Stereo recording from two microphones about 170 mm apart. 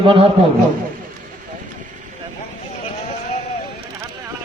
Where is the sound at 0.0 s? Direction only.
30° right (ahead or behind).